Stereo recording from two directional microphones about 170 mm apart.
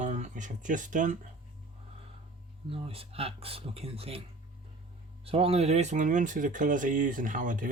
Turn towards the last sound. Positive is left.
turn(degrees=-50)  # may be behind; listen again after turning